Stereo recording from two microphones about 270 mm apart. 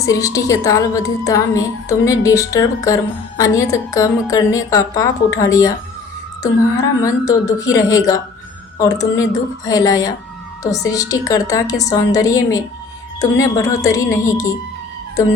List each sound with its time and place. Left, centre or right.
0.0 s a woman's voice: centre